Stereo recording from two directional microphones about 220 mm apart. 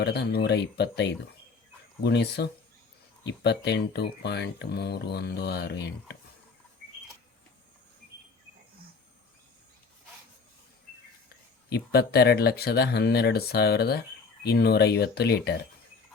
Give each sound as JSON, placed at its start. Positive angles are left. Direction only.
{"t": 0.0, "sound": "speech", "side_deg": 50}
{"t": 11.7, "sound": "speech", "side_deg": 45}